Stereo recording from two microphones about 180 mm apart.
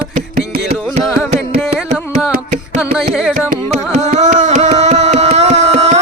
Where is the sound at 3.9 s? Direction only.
40° right (ahead or behind).